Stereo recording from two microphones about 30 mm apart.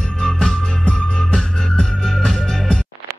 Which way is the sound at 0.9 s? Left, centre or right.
Left.